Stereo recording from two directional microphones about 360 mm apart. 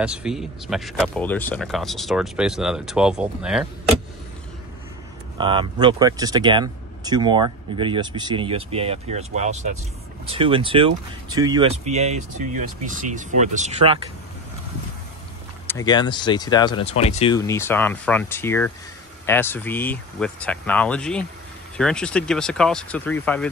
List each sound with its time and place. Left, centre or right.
0.0 s speech: centre
5.4 s speech: centre
15.6 s speech: centre